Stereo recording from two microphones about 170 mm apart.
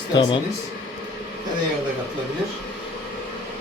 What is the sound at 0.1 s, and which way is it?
Speech, 25° left (ahead or behind).